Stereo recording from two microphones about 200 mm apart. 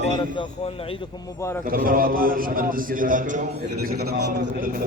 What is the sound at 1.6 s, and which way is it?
A man's voice, 45° right (ahead or behind).